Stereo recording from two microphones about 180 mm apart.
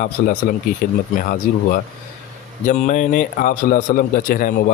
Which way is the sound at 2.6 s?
45° left (ahead or behind).